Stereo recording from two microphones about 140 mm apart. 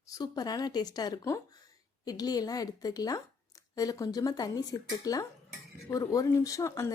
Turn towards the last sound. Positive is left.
turn(degrees=20)  # may be behind; listen again after turning